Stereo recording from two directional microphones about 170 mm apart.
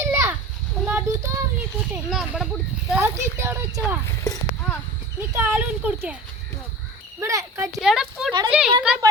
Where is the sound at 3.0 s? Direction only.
15° right (ahead or behind).